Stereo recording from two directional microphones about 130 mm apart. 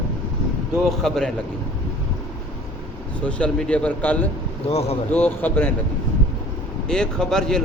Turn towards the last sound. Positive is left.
turn(degrees=5)  # may be behind; listen again after turning